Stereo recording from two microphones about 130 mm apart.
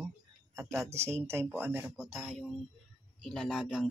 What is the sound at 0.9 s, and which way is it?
Speech, 20° right (ahead or behind).